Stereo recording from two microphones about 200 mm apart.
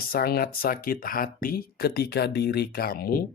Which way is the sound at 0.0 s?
50° left (ahead or behind).